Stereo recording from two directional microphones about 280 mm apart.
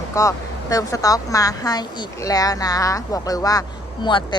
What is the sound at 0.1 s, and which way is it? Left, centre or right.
Speech, centre.